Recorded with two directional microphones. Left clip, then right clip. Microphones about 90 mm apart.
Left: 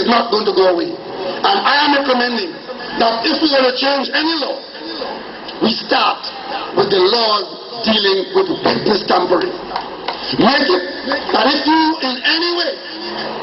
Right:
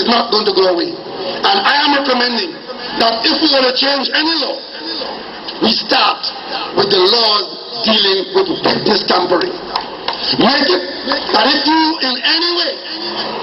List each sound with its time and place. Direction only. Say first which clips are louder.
0.0 s speech: right 1 dB; 20° right (ahead or behind)
5.6 s speech: right 2 dB; 20° right (ahead or behind)
10.2 s speech: right 1 dB; 20° right (ahead or behind)